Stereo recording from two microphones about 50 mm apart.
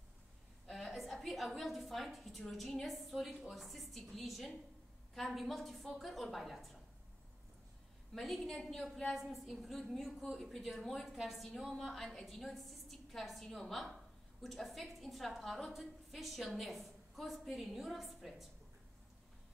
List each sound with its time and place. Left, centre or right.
0.7 s a woman's voice: centre
8.1 s a woman's voice: centre